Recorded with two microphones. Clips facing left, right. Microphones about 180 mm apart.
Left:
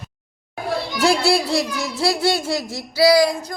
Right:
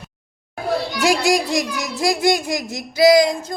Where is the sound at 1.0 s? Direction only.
15° right (ahead or behind).